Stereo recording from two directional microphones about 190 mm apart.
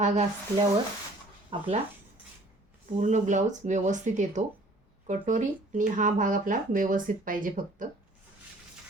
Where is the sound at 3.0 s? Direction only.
40° right (ahead or behind).